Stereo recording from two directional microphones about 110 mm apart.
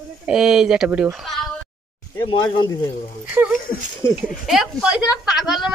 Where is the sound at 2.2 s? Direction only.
40° left (ahead or behind).